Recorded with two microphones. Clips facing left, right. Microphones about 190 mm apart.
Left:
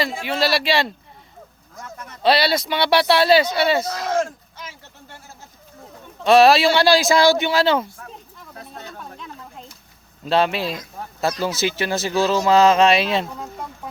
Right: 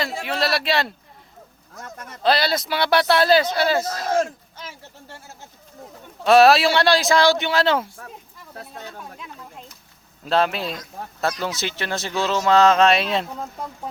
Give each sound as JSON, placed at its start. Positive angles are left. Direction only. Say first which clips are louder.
{"t": 0.0, "sound": "speech", "louder": "left 2 dB", "side_deg": 0}
{"t": 2.2, "sound": "speech", "louder": "left 2 dB", "side_deg": 0}
{"t": 3.8, "sound": "speech", "louder": "even", "side_deg": -45}
{"t": 6.2, "sound": "speech", "louder": "left 1 dB", "side_deg": -5}
{"t": 9.1, "sound": "a sound", "louder": "left 1 dB", "side_deg": -5}
{"t": 10.2, "sound": "speech", "louder": "left 2 dB", "side_deg": 0}